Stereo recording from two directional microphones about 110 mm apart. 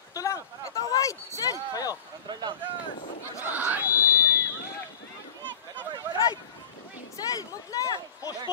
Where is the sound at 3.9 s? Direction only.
30° left (ahead or behind).